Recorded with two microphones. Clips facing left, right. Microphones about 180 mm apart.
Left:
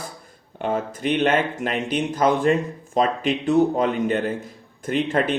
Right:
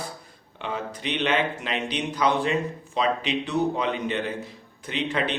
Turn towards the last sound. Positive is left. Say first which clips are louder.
# left 6 dB
turn(degrees=50)  # may be behind; listen again after turning